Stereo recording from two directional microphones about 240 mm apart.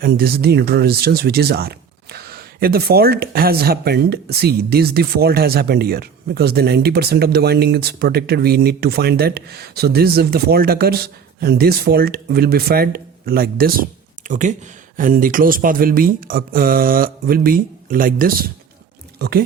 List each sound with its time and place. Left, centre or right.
0.0 s speech: right